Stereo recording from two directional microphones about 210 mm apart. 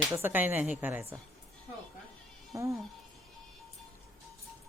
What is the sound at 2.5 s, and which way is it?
Speech, 15° right (ahead or behind).